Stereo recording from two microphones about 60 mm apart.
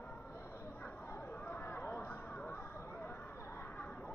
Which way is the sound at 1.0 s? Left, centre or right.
Left.